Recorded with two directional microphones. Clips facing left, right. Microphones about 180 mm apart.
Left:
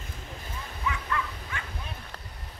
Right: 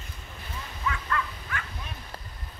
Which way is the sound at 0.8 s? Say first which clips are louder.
Right 1 dB; 15° left (ahead or behind).